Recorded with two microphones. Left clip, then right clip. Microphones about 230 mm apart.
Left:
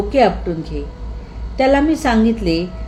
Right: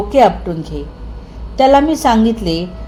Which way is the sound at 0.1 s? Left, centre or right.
Centre.